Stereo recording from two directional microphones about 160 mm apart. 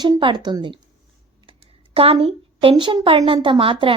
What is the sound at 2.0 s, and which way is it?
Speech, 35° right (ahead or behind).